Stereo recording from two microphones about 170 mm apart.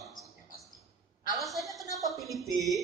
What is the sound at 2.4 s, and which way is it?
Music, 20° right (ahead or behind).